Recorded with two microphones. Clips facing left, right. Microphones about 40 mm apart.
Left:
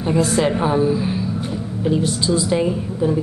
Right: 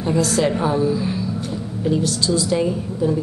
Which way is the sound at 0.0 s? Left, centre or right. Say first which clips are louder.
Left 1 dB; centre.